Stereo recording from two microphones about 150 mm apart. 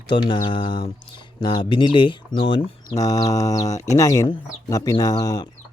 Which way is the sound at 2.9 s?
25° left (ahead or behind).